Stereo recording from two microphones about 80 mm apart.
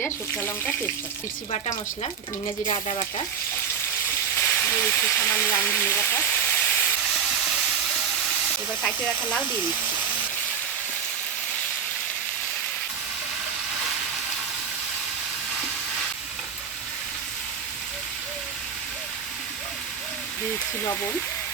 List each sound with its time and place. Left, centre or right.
0.0 s speech: left
4.4 s speech: left
6.3 s steam: left